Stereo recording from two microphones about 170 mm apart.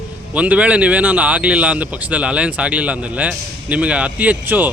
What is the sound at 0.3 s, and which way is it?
Speech, 10° right (ahead or behind).